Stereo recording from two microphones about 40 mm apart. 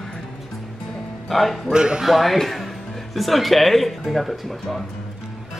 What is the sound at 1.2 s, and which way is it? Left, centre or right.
Speech, centre.